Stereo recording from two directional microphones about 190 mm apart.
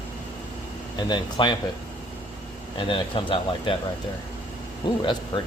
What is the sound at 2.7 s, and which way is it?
Speech, 25° left (ahead or behind).